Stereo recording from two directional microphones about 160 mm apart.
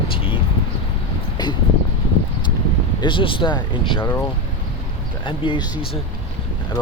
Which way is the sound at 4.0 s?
15° left (ahead or behind).